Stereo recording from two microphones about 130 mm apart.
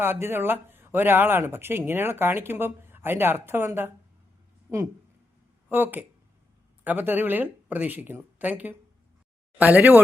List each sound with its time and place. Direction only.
0.0 s speech: 15° right (ahead or behind)
5.6 s speech: 15° right (ahead or behind)